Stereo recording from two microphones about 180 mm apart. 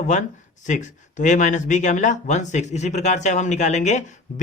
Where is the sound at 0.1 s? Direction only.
40° left (ahead or behind).